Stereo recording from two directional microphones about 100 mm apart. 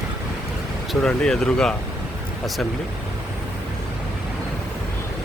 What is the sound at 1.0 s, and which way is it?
Speech, 5° left (ahead or behind).